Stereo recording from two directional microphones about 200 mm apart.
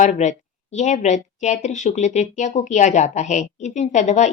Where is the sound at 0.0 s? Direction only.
40° left (ahead or behind).